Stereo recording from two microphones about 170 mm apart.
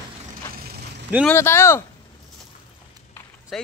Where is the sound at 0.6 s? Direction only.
70° right (ahead or behind).